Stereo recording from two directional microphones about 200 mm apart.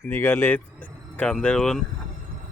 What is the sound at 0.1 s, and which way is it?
Speech, 10° left (ahead or behind).